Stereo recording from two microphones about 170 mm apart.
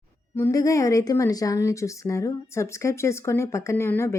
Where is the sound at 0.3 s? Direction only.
15° left (ahead or behind).